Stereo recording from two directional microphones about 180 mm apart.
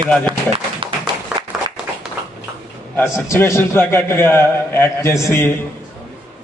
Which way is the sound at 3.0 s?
15° left (ahead or behind).